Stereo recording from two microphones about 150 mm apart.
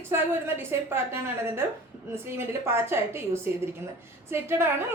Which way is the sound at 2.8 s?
15° right (ahead or behind).